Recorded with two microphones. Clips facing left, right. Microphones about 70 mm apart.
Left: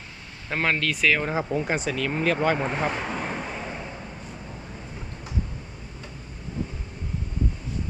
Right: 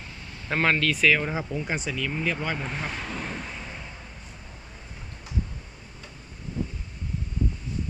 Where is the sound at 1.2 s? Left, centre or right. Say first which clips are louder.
Left 3 dB; centre.